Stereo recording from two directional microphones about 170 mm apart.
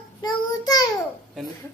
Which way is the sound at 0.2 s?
25° left (ahead or behind).